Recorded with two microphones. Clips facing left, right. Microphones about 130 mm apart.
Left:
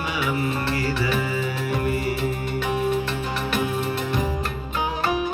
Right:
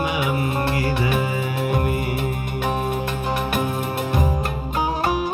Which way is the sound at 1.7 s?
45° right (ahead or behind).